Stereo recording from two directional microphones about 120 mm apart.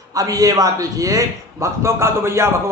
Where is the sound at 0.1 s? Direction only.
30° right (ahead or behind).